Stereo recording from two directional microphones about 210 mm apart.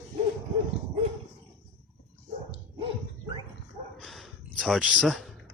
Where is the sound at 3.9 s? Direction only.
Centre (ahead or behind).